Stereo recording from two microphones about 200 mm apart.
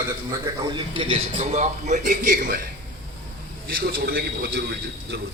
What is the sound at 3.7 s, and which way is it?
Speech, 50° right (ahead or behind).